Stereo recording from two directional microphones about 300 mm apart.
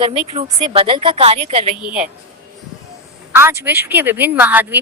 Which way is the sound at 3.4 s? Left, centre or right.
Centre.